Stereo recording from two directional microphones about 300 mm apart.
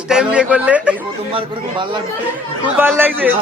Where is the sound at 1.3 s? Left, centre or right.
Centre.